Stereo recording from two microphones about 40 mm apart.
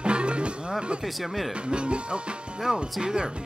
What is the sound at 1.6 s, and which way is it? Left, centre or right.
Speech, right.